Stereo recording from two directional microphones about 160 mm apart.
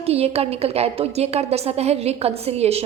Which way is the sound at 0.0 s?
40° right (ahead or behind).